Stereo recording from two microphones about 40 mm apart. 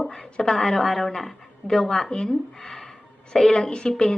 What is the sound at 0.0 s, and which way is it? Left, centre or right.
A woman's voice, centre.